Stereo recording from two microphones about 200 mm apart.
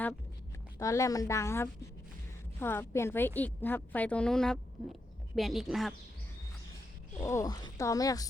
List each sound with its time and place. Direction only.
0.8 s a woman's voice: 15° left (ahead or behind); by 5.9 s centre (ahead or behind)
7.2 s a woman's voice: 15° left (ahead or behind)